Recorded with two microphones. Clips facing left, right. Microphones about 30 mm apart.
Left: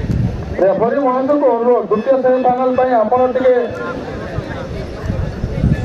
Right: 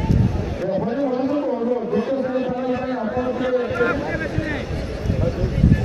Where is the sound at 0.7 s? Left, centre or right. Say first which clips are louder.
Left 9 dB; left.